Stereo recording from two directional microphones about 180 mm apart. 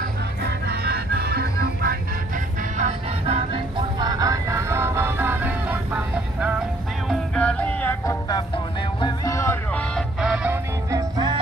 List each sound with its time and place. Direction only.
0.4 s music: 65° right (ahead or behind)
3.3 s music: 35° right (ahead or behind)
4.0 s music: 20° right (ahead or behind)
7.1 s music: 5° left (ahead or behind)
8.0 s music: 20° left (ahead or behind); by 11.3 s 20° right (ahead or behind)